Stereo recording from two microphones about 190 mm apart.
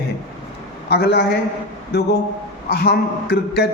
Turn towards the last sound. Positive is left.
turn(degrees=55)  # may be behind; listen again after turning